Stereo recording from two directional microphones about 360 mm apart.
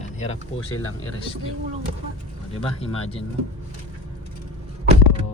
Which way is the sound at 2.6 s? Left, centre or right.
Centre.